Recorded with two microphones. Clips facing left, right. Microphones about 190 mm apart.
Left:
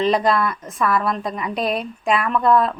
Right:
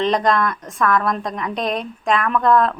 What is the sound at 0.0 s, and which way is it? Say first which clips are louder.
A woman's voice: even; 5° left (ahead or behind).